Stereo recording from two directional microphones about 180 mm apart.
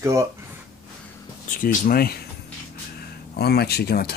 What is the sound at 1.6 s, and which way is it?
Speech, 50° left (ahead or behind).